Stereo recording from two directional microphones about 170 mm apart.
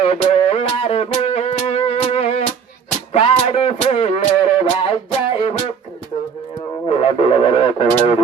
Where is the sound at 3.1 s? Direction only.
35° left (ahead or behind).